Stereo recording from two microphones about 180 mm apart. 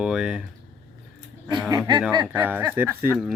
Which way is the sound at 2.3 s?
10° right (ahead or behind).